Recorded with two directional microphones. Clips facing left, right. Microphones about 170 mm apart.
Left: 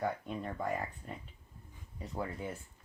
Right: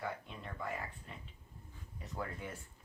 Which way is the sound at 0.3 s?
45° left (ahead or behind).